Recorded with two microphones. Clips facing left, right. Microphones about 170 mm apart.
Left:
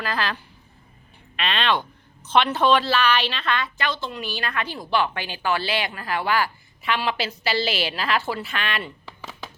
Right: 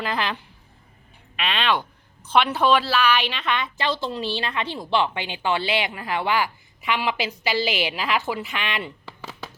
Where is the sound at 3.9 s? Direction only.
35° right (ahead or behind).